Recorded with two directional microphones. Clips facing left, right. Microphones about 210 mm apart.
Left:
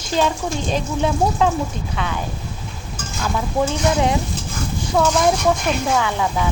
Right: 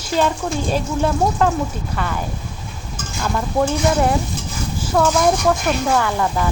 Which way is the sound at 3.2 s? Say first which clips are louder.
Right 1 dB; 5° left (ahead or behind).